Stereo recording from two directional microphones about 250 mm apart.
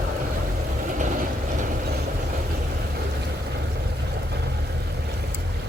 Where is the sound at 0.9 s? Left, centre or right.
Right.